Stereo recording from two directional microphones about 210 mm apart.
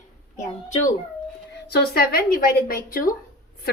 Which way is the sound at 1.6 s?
50° left (ahead or behind).